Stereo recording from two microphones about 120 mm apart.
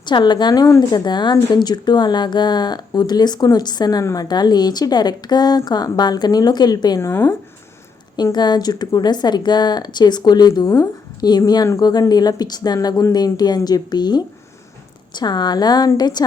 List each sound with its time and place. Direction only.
0.0 s a woman's voice: 40° left (ahead or behind)
7.0 s speech: 20° left (ahead or behind)
8.1 s a woman's voice: 35° left (ahead or behind)